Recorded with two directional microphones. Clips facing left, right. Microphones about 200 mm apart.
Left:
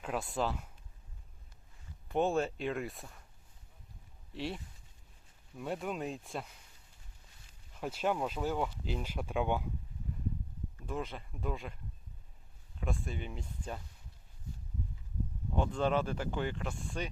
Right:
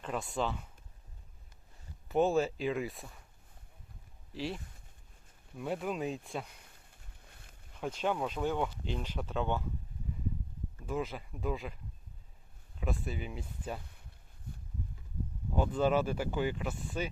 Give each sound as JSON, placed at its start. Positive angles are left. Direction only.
{"t": 0.0, "sound": "speech", "side_deg": 5}
{"t": 2.0, "sound": "speech", "side_deg": 0}
{"t": 4.3, "sound": "speech", "side_deg": 0}
{"t": 6.9, "sound": "a sound", "side_deg": -60}
{"t": 7.8, "sound": "speech", "side_deg": 5}
{"t": 10.8, "sound": "speech", "side_deg": 0}
{"t": 12.8, "sound": "speech", "side_deg": -5}
{"t": 15.5, "sound": "speech", "side_deg": -5}